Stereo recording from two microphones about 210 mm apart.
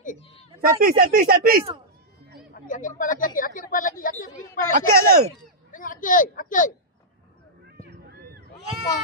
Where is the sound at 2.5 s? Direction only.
40° left (ahead or behind).